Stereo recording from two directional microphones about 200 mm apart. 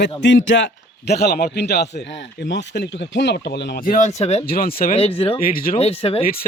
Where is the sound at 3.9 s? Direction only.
35° left (ahead or behind).